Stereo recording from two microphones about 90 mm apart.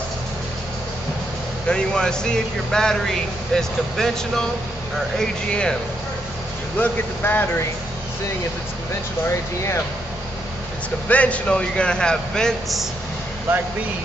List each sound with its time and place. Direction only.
1.7 s speech: 10° left (ahead or behind)
6.8 s speech: 20° left (ahead or behind)
11.1 s speech: 15° left (ahead or behind)